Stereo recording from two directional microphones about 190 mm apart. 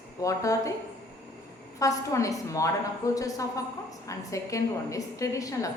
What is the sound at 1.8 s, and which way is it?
A woman's voice, 15° left (ahead or behind).